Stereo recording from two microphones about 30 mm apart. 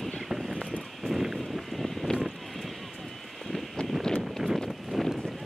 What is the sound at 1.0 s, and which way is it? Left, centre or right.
Clip-clop, centre.